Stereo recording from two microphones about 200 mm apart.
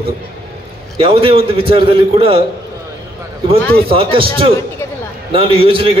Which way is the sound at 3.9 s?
25° right (ahead or behind).